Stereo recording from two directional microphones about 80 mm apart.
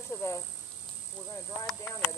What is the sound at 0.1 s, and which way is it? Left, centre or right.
Cricket, left.